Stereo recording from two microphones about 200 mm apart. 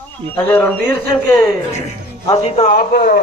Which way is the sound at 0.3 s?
10° left (ahead or behind).